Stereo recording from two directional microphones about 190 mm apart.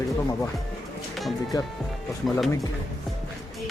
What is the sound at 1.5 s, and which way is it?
Speech, 20° left (ahead or behind).